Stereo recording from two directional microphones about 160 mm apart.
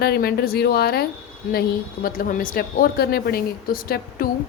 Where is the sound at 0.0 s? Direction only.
75° left (ahead or behind).